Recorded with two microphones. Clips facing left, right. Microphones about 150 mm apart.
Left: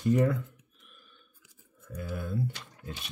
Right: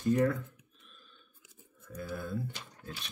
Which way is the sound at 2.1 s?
10° left (ahead or behind).